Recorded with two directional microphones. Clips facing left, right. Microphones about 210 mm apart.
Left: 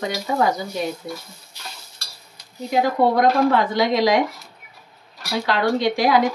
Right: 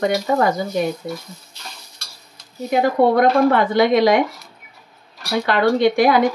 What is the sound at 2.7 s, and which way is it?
Speech, 55° right (ahead or behind).